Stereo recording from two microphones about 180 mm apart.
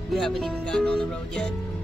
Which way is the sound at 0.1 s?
Centre (ahead or behind).